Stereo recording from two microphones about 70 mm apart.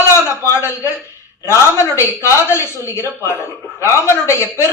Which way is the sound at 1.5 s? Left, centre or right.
Left.